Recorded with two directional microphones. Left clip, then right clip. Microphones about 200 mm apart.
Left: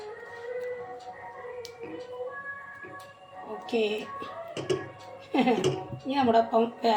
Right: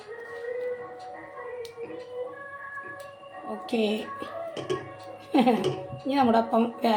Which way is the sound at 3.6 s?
25° right (ahead or behind).